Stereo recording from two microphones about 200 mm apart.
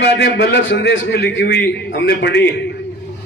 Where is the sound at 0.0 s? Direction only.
60° left (ahead or behind).